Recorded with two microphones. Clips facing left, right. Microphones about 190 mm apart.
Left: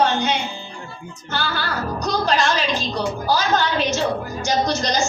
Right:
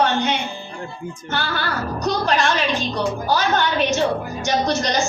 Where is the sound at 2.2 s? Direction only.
55° right (ahead or behind).